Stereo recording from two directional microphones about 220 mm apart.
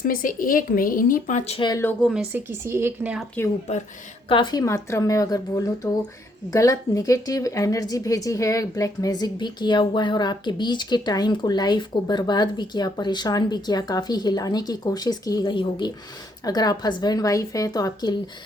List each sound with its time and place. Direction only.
0.0 s speech: 40° left (ahead or behind); by 1.8 s 20° left (ahead or behind)
1.8 s a woman's voice: 5° left (ahead or behind)
4.3 s a woman's voice: 20° left (ahead or behind)